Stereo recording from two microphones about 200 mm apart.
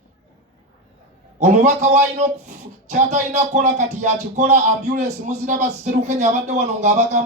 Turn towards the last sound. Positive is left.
turn(degrees=-35)  # may be behind; listen again after turning